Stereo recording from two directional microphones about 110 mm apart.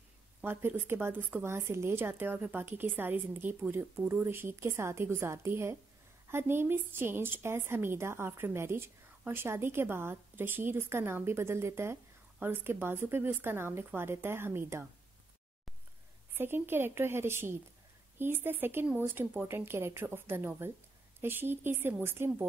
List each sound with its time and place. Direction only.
0.4 s a woman's voice: 20° right (ahead or behind)
16.3 s a woman's voice: 20° right (ahead or behind)